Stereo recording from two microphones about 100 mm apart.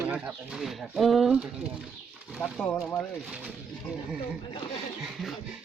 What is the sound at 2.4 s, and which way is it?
Speech, 10° left (ahead or behind).